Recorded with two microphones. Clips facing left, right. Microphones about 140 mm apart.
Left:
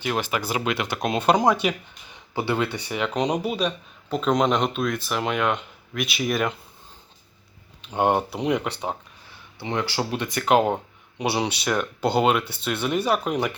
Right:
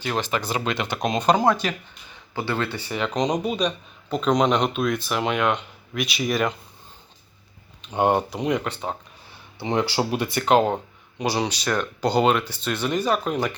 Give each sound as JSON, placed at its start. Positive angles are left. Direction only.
{"t": 0.0, "sound": "speech", "side_deg": 10}
{"t": 7.9, "sound": "speech", "side_deg": 5}
{"t": 9.6, "sound": "speech", "side_deg": -25}
{"t": 10.3, "sound": "speech", "side_deg": 5}